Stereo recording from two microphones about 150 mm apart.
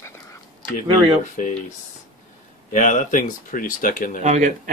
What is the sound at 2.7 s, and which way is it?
Speech, 55° left (ahead or behind).